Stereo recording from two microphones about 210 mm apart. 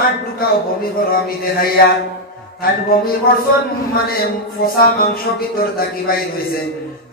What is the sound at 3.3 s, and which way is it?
Speech, 45° left (ahead or behind).